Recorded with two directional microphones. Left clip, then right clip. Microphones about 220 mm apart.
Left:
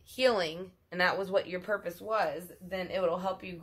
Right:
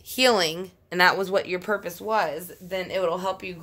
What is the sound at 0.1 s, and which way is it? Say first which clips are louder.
A woman's voice: right 7 dB; 55° right (ahead or behind).